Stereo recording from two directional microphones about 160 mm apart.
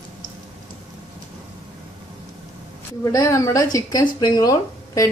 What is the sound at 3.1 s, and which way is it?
Speech, 20° left (ahead or behind).